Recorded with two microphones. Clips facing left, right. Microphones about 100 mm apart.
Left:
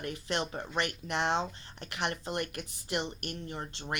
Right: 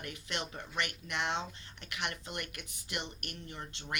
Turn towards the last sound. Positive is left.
turn(degrees=35)  # may be behind; listen again after turning